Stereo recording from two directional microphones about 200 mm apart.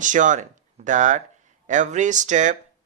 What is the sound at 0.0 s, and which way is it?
Speech, 40° right (ahead or behind).